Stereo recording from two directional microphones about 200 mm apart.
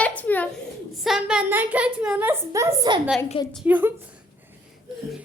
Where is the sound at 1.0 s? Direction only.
5° right (ahead or behind); by 3.0 s 20° right (ahead or behind).